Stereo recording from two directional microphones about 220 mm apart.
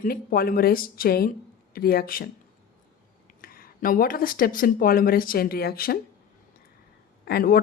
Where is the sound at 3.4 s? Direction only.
40° left (ahead or behind).